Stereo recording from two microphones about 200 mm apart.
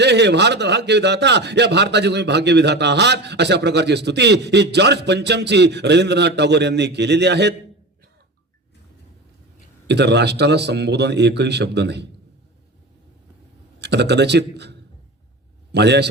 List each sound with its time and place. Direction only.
0.0 s a man's voice: 55° right (ahead or behind)
9.8 s a man's voice: 55° right (ahead or behind)
13.7 s a man's voice: 55° right (ahead or behind)